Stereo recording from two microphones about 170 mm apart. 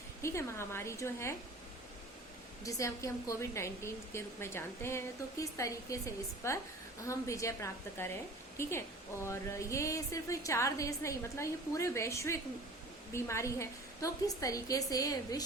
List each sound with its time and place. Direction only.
0.2 s a woman's voice: 15° left (ahead or behind)
2.6 s a woman's voice: 20° left (ahead or behind)